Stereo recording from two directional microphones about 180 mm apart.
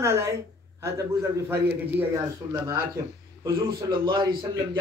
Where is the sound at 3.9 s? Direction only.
25° right (ahead or behind).